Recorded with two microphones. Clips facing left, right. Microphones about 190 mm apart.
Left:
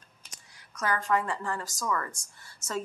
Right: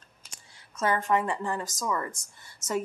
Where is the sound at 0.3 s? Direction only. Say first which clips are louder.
Right 1 dB; 30° right (ahead or behind).